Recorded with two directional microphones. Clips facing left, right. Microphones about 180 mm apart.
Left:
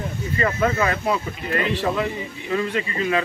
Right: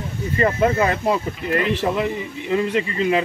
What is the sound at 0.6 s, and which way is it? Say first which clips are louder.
Speech: right 3 dB; 25° right (ahead or behind).